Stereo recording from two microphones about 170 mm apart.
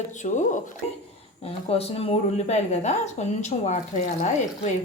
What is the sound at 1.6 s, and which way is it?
Speech, 35° left (ahead or behind).